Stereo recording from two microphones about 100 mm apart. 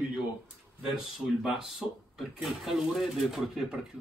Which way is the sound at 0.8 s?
5° right (ahead or behind).